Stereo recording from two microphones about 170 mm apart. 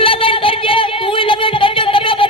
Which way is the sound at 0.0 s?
30° left (ahead or behind).